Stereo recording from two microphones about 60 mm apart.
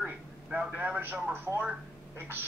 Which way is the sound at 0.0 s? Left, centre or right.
Centre.